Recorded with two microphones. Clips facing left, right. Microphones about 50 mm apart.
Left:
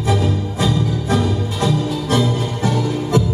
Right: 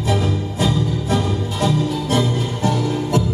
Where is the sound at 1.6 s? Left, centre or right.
Right.